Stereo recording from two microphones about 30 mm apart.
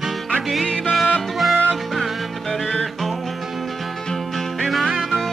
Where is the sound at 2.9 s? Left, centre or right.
Centre.